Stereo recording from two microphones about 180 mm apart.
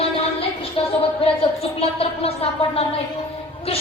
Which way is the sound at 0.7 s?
30° left (ahead or behind).